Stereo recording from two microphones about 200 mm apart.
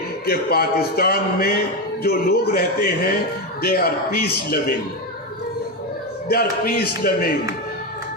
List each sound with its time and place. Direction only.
0.3 s a man's voice: 50° left (ahead or behind)
6.2 s a man's voice: 50° left (ahead or behind)